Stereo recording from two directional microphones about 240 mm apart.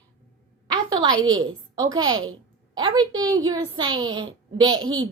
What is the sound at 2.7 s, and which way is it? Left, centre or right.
A woman's voice, centre.